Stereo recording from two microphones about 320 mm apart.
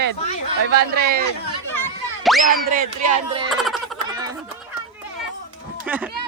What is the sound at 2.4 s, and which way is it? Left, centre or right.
Speech, right.